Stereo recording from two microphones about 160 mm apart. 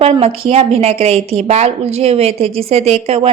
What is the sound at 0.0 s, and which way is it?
Speech, 40° right (ahead or behind).